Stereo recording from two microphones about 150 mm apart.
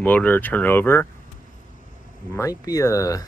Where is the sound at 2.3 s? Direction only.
20° left (ahead or behind).